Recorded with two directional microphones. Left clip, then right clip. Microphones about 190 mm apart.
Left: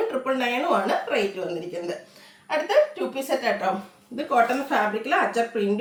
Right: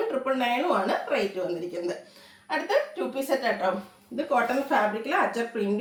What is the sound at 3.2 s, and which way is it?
Speech, 15° left (ahead or behind).